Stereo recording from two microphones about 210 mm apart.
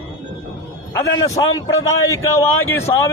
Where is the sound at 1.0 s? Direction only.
15° left (ahead or behind).